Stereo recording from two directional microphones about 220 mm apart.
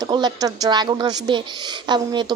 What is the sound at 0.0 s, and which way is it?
A woman's voice, 20° right (ahead or behind).